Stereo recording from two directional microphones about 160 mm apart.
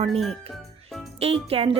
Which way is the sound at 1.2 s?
35° right (ahead or behind).